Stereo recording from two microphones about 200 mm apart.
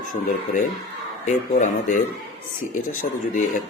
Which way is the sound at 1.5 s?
40° left (ahead or behind).